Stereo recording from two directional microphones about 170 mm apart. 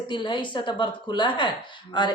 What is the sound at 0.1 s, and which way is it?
Speech, 25° left (ahead or behind).